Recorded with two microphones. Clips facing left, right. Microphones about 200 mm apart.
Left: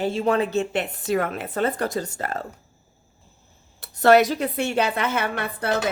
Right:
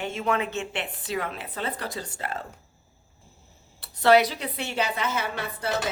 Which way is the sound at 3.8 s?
45° left (ahead or behind).